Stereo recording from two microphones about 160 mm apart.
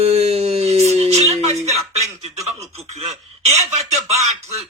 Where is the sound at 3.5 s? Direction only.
40° right (ahead or behind).